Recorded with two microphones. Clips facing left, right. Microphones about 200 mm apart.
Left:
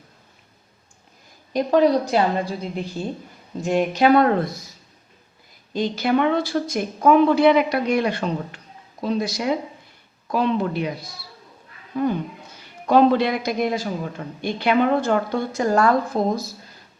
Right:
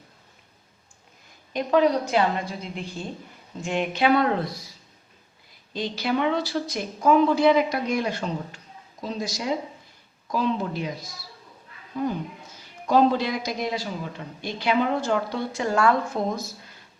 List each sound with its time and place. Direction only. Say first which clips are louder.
1.5 s a woman's voice: left 4 dB; 35° left (ahead or behind)
5.7 s speech: left 5 dB; 50° left (ahead or behind)
12.5 s a man's voice: left 4 dB; 65° left (ahead or behind); by 16.6 s 35° left (ahead or behind)